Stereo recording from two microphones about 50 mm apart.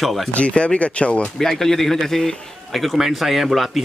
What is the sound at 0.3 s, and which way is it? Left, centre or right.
Speech, left.